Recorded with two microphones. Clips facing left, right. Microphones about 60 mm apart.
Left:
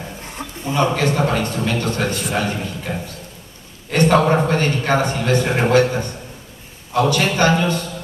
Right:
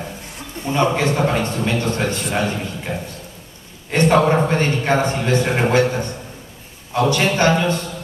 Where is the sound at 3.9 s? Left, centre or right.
Right.